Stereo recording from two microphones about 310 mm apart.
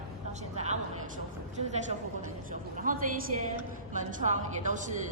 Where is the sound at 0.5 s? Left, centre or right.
Right.